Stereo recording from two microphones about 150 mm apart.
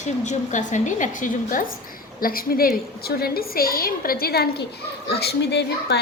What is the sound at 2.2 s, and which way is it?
A woman's voice, 75° left (ahead or behind).